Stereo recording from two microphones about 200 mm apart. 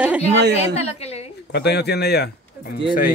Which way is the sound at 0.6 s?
30° left (ahead or behind).